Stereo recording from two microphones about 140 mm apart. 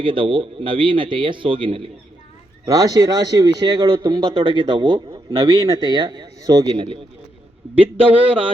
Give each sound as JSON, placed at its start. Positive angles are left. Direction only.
{"t": 0.0, "sound": "speech", "side_deg": -35}
{"t": 2.6, "sound": "a man's voice", "side_deg": -25}
{"t": 6.7, "sound": "speech", "side_deg": -40}